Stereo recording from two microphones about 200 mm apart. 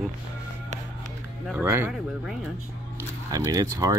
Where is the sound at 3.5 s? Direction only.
20° right (ahead or behind).